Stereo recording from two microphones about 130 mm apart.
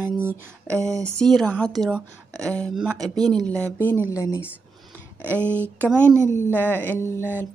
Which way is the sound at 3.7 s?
15° left (ahead or behind).